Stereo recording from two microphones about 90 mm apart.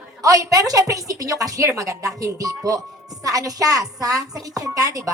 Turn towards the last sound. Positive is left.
turn(degrees=-40)  # may be behind; listen again after turning